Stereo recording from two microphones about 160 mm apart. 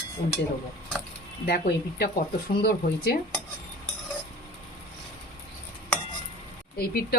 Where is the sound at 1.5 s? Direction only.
75° left (ahead or behind).